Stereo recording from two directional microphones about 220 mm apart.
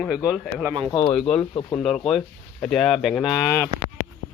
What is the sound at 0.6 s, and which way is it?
Speech, 20° right (ahead or behind).